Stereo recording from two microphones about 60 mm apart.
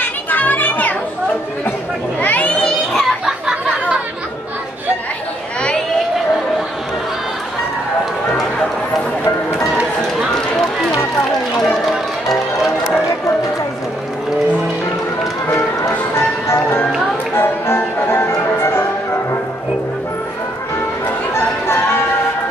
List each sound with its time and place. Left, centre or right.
0.0 s children playing: left
2.2 s children playing: left
2.6 s children playing: centre
3.3 s a sound: centre
11.7 s music: centre
16.4 s music: left
17.4 s music: left
21.3 s music: left